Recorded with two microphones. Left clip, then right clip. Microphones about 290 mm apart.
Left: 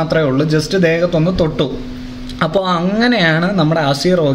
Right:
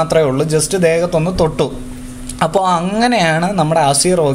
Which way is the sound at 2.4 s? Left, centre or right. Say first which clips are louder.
Right 2 dB; centre.